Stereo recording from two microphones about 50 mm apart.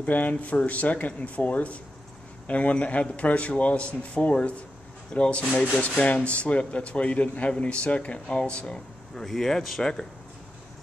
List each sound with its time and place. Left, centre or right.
0.0 s a man's voice: left
5.4 s speech: centre
5.8 s a man's voice: left; by 10.0 s centre